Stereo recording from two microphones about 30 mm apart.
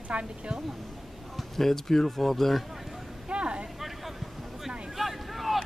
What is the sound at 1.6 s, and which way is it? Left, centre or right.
Speech, centre.